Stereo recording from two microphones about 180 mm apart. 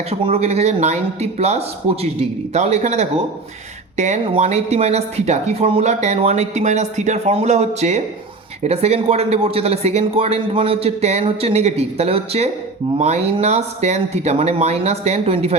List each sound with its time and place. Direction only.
0.1 s speech: 35° right (ahead or behind)